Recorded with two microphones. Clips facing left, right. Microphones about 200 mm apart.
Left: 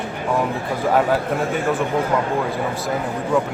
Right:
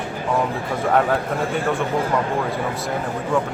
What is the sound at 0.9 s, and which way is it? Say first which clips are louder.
Speech: left 1 dB; centre (ahead or behind).